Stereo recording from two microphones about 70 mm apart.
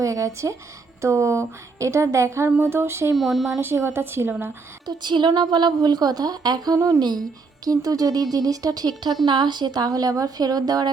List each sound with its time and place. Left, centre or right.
0.0 s a woman's voice: right
3.2 s speech: centre
3.6 s a woman's voice: right
4.9 s a woman's voice: right
6.7 s speech: right
7.0 s speech: right
9.2 s a woman's voice: right